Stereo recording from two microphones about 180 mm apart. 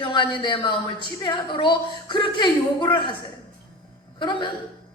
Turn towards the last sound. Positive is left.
turn(degrees=25)  # may be behind; listen again after turning